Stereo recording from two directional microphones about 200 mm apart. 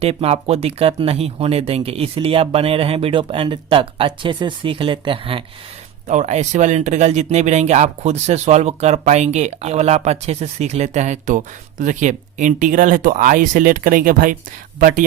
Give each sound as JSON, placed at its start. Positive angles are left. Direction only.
{"t": 0.0, "sound": "speech", "side_deg": -30}